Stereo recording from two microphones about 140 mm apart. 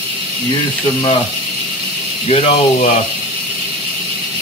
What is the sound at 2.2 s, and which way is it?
Speech, 45° left (ahead or behind).